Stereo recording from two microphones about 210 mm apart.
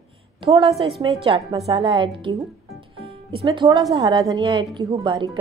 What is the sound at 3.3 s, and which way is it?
A woman's voice, 25° right (ahead or behind).